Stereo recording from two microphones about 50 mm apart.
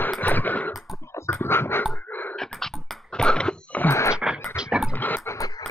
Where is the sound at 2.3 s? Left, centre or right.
Centre.